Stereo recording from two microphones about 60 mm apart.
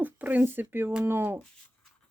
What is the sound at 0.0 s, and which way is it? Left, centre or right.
Speech, right.